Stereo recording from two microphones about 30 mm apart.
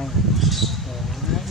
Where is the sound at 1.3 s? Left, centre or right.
Centre.